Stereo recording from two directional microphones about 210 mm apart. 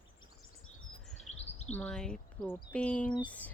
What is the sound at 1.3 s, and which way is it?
Chirp, 30° left (ahead or behind).